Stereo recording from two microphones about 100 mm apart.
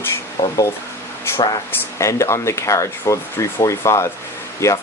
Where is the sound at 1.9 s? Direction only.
30° left (ahead or behind).